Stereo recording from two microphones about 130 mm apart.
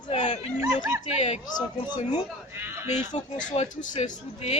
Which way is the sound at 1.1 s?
55° left (ahead or behind).